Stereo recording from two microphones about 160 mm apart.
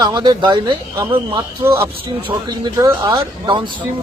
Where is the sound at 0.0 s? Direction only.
25° right (ahead or behind).